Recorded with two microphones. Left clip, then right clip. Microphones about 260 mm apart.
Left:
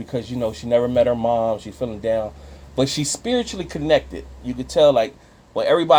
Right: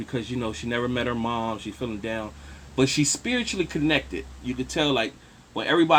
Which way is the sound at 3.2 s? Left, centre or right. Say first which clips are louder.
Left 4 dB; left.